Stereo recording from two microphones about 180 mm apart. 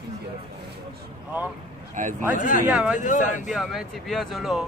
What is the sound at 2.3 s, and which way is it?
Speech, 50° left (ahead or behind).